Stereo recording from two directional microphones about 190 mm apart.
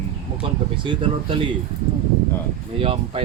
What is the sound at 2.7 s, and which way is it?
Speech, 30° right (ahead or behind).